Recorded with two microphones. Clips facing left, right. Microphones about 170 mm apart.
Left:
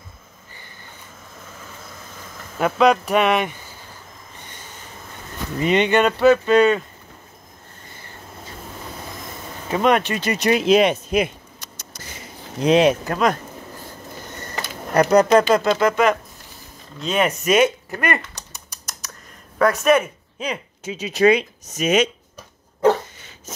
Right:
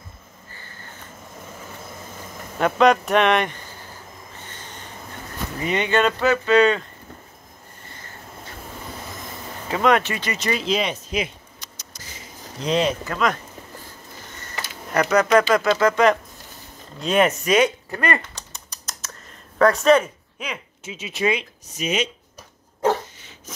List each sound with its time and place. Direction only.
1.9 s train: 15° right (ahead or behind)
2.6 s speech: 5° left (ahead or behind)
5.6 s speech: 20° left (ahead or behind)
9.7 s speech: 15° left (ahead or behind)
10.2 s a sound: 55° left (ahead or behind)
12.6 s speech: 65° left (ahead or behind)
13.1 s speech: 35° left (ahead or behind)
14.5 s speech: 40° left (ahead or behind)
15.8 s speech: 10° left (ahead or behind)
19.6 s speech: 15° left (ahead or behind)
20.3 s speech: 35° left (ahead or behind)